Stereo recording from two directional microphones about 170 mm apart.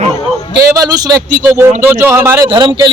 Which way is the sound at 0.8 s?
25° right (ahead or behind).